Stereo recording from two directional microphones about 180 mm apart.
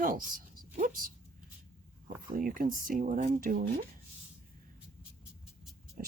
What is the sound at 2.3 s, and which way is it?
Speech, 50° right (ahead or behind).